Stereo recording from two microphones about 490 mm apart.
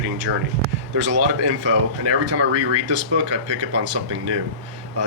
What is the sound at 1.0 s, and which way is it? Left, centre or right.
Speech, right.